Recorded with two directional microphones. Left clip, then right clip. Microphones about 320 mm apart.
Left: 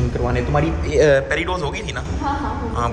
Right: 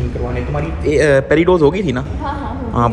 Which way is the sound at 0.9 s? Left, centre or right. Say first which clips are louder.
Right 2 dB; right.